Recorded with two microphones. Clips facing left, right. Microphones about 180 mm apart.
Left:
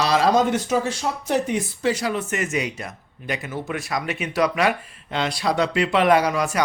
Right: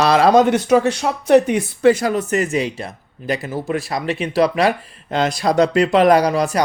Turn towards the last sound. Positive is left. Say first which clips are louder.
# right 4 dB
turn(degrees=-35)  # may be behind; listen again after turning